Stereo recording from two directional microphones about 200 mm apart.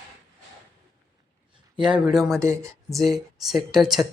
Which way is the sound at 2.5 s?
15° right (ahead or behind).